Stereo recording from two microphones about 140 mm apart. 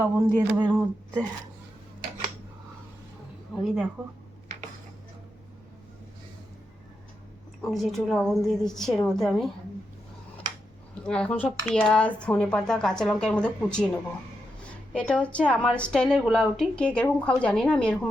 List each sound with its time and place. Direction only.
0.0 s speech: 20° right (ahead or behind)
3.5 s speech: centre (ahead or behind)
7.6 s speech: centre (ahead or behind)
11.0 s a woman's voice: 5° left (ahead or behind)
14.9 s a woman's voice: 10° left (ahead or behind)